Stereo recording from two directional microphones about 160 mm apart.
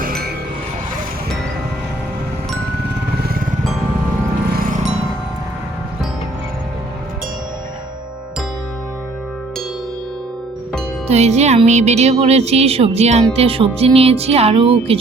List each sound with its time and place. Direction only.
0.0 s music: 70° right (ahead or behind)
11.1 s speech: 45° right (ahead or behind)